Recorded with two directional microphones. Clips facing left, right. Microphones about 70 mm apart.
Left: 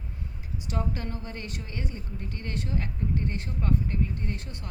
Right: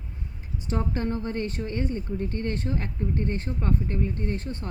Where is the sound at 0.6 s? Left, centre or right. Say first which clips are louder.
Right 5 dB; right.